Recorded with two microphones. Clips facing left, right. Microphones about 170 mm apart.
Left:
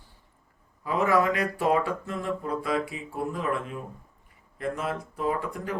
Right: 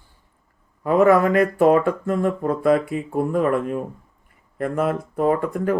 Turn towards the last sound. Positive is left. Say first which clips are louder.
# right 9 dB
turn(degrees=-55)  # may be behind; listen again after turning